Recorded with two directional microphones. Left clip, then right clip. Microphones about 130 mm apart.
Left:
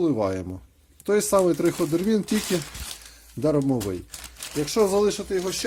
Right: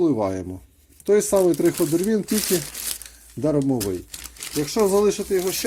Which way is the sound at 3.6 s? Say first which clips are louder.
Right 2 dB; 40° left (ahead or behind).